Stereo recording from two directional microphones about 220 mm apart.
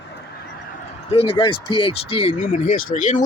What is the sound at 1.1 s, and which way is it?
Speech, 25° left (ahead or behind).